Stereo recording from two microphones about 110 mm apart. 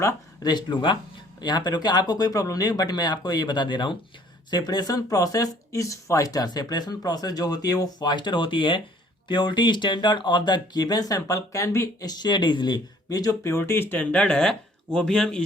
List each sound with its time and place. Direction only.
0.0 s speech: 40° left (ahead or behind)
12.0 s speech: 40° left (ahead or behind); by 15.4 s 10° left (ahead or behind)